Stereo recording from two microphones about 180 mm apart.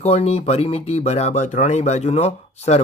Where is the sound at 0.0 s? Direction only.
35° left (ahead or behind).